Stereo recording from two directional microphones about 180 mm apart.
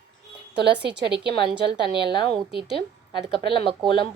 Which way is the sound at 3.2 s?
30° right (ahead or behind).